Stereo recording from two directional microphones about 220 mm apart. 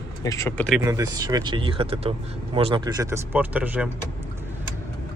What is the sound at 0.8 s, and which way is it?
Speech, 15° right (ahead or behind).